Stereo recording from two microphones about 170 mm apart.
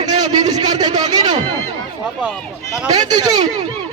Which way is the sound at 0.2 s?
25° right (ahead or behind).